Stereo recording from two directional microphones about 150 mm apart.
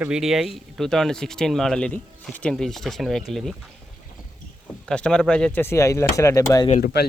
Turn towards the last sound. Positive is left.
turn(degrees=75)  # may be behind; listen again after turning